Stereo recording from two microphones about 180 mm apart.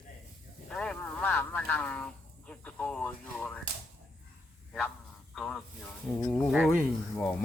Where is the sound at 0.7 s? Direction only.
5° left (ahead or behind).